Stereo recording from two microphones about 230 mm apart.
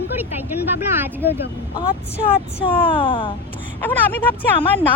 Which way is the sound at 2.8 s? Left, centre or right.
Left.